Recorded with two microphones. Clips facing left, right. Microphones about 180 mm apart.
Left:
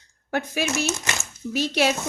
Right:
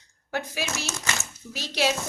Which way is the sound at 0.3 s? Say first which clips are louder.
Left 5 dB; 55° left (ahead or behind).